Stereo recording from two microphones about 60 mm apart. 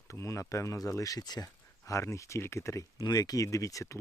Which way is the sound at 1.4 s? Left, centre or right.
Left.